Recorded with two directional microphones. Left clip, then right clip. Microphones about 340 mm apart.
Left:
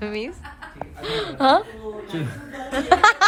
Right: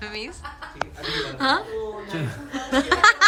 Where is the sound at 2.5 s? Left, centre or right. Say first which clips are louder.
Left 3 dB; centre.